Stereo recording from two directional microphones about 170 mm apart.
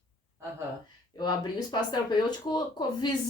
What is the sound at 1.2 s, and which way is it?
Speech, 25° left (ahead or behind).